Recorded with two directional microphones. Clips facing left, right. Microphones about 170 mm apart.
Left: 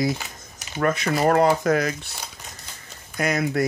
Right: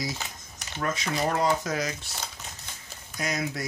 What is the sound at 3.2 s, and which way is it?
Speech, 60° left (ahead or behind).